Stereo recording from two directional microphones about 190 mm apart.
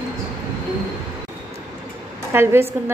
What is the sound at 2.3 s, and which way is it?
Speech, 10° right (ahead or behind).